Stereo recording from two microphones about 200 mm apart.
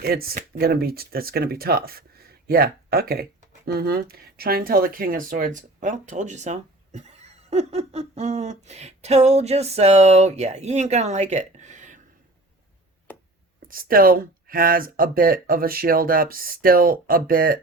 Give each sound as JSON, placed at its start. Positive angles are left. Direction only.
{"t": 0.0, "sound": "speech", "side_deg": -50}
{"t": 13.7, "sound": "speech", "side_deg": -45}